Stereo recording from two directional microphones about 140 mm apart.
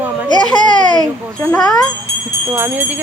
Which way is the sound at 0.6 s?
30° left (ahead or behind).